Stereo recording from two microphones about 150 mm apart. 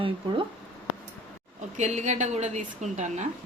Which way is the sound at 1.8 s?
50° right (ahead or behind).